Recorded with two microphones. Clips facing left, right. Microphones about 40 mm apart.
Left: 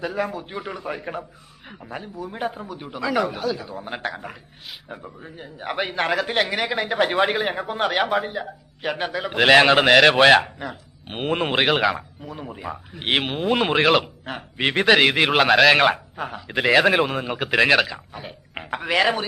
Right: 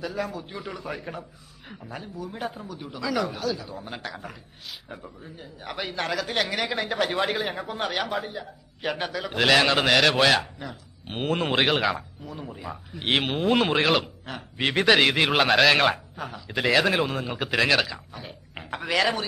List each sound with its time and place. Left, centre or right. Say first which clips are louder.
0.0 s speech: left 4 dB; left
5.2 s speech: left 6 dB; left
8.1 s a man's voice: left 7 dB; centre; by 10.5 s left
10.6 s a man's voice: left 5 dB; centre
11.6 s a man's voice: left 5 dB; centre
12.3 s speech: left 4 dB; left
13.1 s a man's voice: left 1 dB; centre
14.0 s a man's voice: left 4 dB; left; by 15.7 s centre
15.7 s a man's voice: left 4 dB; centre
17.9 s speech: left 3 dB; left